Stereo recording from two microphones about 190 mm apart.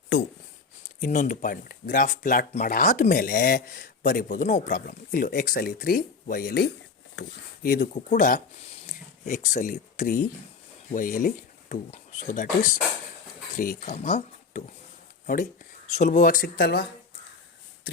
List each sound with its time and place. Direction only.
1.0 s speech: 40° left (ahead or behind)
13.6 s speech: 45° left (ahead or behind)
15.9 s speech: 40° left (ahead or behind)